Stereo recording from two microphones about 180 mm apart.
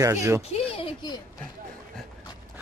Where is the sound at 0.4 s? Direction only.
35° left (ahead or behind).